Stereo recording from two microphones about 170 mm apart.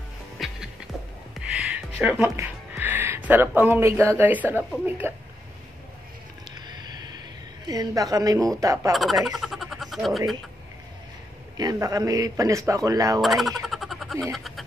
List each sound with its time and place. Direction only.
0.4 s music: centre (ahead or behind)
2.7 s speech: 10° right (ahead or behind)
6.5 s a sound: 25° right (ahead or behind)
7.6 s speech: 20° right (ahead or behind)
8.9 s speech: centre (ahead or behind)
11.5 s speech: 20° right (ahead or behind)
13.2 s a sound: centre (ahead or behind)